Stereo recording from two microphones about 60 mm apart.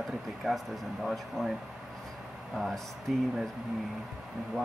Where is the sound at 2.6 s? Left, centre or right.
Centre.